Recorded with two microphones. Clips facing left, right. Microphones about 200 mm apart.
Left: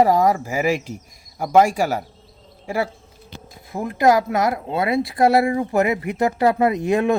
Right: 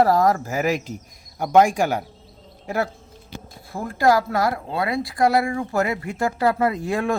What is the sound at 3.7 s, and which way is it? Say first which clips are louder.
Speech: left 2 dB; 20° left (ahead or behind).